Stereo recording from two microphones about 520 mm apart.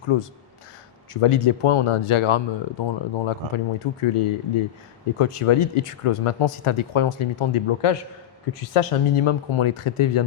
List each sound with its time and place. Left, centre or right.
0.1 s speech: left
8.5 s speech: left